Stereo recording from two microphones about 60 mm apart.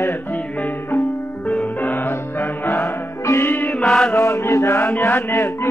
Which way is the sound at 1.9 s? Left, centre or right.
Left.